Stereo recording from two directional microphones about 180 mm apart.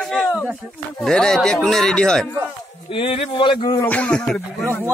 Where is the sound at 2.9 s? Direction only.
30° left (ahead or behind).